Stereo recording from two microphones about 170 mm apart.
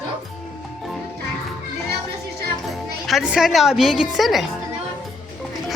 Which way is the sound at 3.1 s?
5° right (ahead or behind).